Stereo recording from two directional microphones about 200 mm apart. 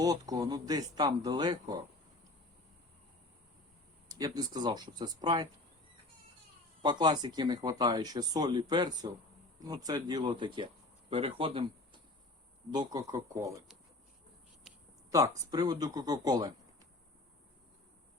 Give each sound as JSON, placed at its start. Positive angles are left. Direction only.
{"t": 0.0, "sound": "speech", "side_deg": -20}
{"t": 4.1, "sound": "speech", "side_deg": -20}
{"t": 6.8, "sound": "speech", "side_deg": -20}
{"t": 12.7, "sound": "speech", "side_deg": -20}
{"t": 15.1, "sound": "speech", "side_deg": -15}